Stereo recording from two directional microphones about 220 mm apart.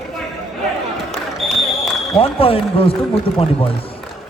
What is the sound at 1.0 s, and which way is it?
Basketball bounce, centre (ahead or behind).